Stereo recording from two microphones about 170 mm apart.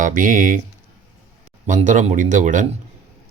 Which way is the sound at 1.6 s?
45° right (ahead or behind).